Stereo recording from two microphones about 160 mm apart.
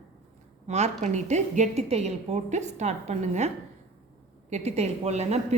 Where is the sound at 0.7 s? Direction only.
45° right (ahead or behind).